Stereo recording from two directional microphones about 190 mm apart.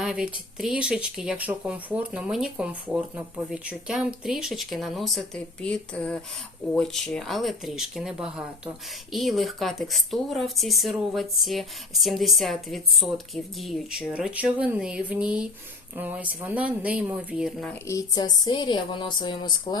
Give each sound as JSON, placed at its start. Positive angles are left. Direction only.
{"t": 0.0, "sound": "speech", "side_deg": 0}
{"t": 17.7, "sound": "a woman's voice", "side_deg": 15}